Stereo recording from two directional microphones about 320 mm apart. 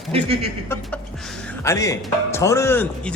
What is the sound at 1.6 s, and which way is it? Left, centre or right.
Speech, centre.